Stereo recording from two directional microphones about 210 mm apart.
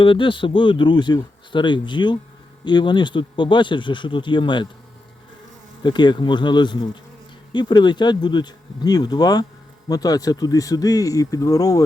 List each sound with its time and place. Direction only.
0.0 s speech: 25° left (ahead or behind)
5.8 s speech: 20° left (ahead or behind)